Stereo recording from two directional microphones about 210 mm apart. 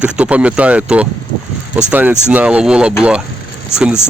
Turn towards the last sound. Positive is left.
turn(degrees=-5)  # may be behind; listen again after turning